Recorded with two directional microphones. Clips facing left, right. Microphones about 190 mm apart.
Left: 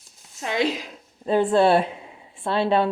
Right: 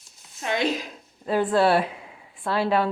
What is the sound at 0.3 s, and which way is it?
A woman's voice, 30° left (ahead or behind).